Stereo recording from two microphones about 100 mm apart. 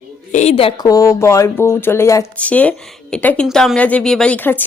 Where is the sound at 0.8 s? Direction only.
35° left (ahead or behind).